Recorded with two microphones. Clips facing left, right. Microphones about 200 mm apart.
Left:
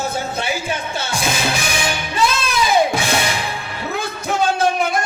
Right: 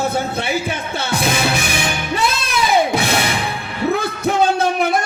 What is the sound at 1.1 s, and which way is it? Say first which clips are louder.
Music: right 4 dB; 60° right (ahead or behind).